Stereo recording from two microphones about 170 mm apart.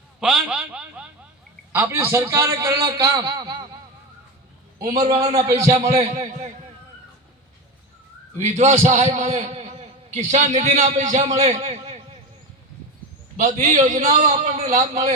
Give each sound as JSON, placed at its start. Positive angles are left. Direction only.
{"t": 0.2, "sound": "a sound", "side_deg": -5}
{"t": 1.7, "sound": "a man's voice", "side_deg": -15}
{"t": 5.4, "sound": "a man's voice", "side_deg": -35}
{"t": 8.4, "sound": "a man's voice", "side_deg": -45}
{"t": 13.3, "sound": "a man's voice", "side_deg": -45}